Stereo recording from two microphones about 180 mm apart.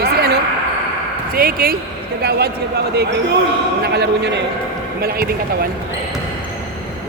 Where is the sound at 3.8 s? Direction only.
65° right (ahead or behind).